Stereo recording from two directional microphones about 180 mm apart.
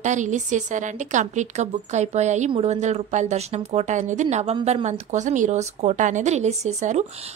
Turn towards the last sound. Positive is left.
turn(degrees=-40)  # may be behind; listen again after turning